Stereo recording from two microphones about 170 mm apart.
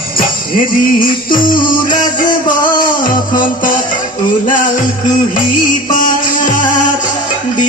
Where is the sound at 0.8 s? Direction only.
55° left (ahead or behind).